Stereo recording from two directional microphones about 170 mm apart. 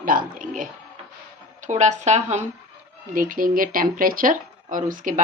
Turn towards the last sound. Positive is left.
turn(degrees=-50)  # may be behind; listen again after turning